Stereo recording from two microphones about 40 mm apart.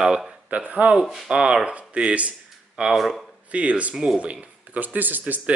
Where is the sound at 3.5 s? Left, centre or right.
Right.